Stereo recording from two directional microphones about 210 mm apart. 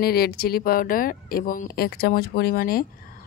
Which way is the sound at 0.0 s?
50° left (ahead or behind).